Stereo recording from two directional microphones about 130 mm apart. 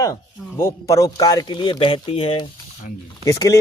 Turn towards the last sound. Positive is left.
turn(degrees=25)  # may be behind; listen again after turning